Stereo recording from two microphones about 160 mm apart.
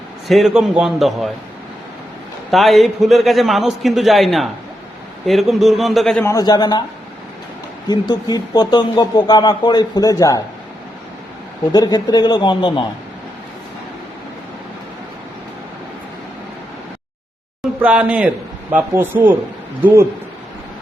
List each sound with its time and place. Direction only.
0.3 s a man's voice: centre (ahead or behind)
2.5 s a man's voice: centre (ahead or behind)
6.2 s speech: 25° left (ahead or behind)
7.9 s speech: 25° left (ahead or behind)
11.7 s speech: 25° left (ahead or behind)
17.6 s speech: 5° right (ahead or behind)